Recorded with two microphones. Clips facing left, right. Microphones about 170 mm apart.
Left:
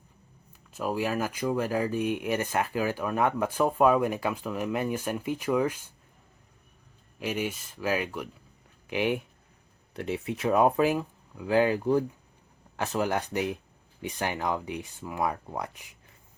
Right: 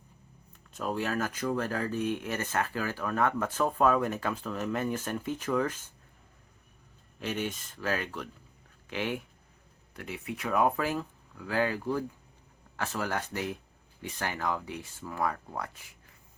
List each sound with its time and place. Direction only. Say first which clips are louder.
0.7 s speech: left 3 dB; 5° left (ahead or behind)
7.2 s speech: left 3 dB; 10° left (ahead or behind)
9.9 s speech: left 7 dB; 25° left (ahead or behind)